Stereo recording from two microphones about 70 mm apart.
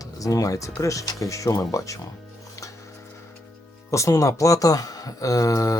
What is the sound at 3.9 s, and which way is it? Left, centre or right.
Speech, left.